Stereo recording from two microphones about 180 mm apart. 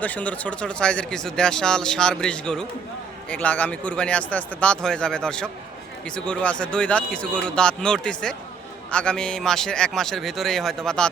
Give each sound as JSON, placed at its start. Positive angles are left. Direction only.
{"t": 0.0, "sound": "a man's voice", "side_deg": 10}